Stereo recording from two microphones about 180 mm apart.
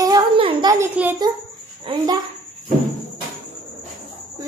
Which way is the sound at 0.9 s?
10° right (ahead or behind).